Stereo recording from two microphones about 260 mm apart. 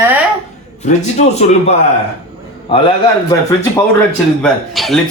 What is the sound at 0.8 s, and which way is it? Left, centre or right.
Speech, left.